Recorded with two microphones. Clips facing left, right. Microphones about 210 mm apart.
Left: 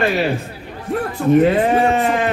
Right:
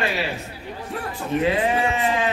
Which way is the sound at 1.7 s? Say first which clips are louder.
Left 6 dB; 50° left (ahead or behind).